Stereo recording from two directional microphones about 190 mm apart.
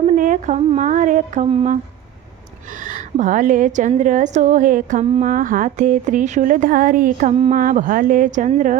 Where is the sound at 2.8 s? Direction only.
40° right (ahead or behind).